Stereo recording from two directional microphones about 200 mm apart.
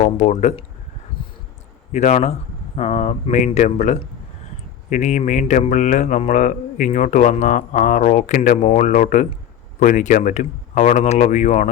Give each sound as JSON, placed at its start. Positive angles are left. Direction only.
{"t": 0.0, "sound": "speech", "side_deg": 35}
{"t": 1.9, "sound": "speech", "side_deg": 35}